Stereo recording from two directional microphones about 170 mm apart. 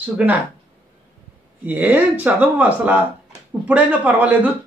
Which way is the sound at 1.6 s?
10° right (ahead or behind).